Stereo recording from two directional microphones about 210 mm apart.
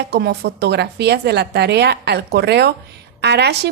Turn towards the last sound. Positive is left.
turn(degrees=-55)  # may be behind; listen again after turning